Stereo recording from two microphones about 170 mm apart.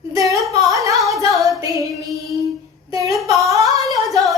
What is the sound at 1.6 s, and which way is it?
Speech, 20° right (ahead or behind).